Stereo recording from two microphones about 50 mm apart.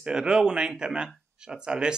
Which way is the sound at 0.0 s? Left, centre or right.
Centre.